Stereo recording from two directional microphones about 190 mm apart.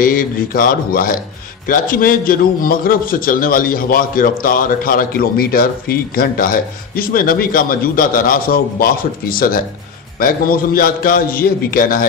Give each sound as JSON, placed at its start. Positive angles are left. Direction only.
{"t": 0.0, "sound": "a man's voice", "side_deg": 45}